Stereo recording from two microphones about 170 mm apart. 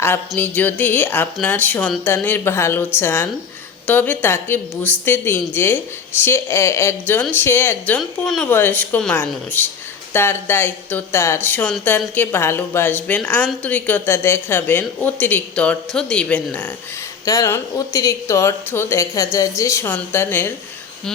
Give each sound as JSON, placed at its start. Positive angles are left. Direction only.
{"t": 0.0, "sound": "a woman's voice", "side_deg": 10}